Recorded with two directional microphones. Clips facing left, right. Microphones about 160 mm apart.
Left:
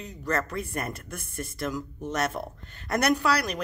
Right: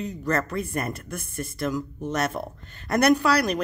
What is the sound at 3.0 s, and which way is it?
Speech, 50° right (ahead or behind).